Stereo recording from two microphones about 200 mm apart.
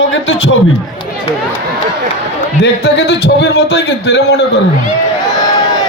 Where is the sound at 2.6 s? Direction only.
55° left (ahead or behind).